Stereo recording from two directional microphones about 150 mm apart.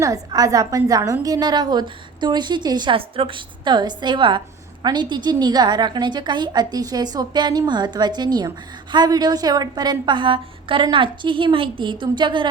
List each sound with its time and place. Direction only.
0.0 s a woman's voice: 25° right (ahead or behind)